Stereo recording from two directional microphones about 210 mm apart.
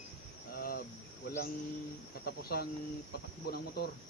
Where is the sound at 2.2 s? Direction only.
45° left (ahead or behind).